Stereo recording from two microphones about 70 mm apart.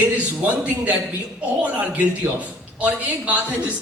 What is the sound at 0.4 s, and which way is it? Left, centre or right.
Speech, centre.